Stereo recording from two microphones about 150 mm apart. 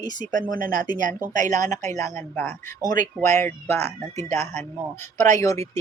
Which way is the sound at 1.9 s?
20° left (ahead or behind).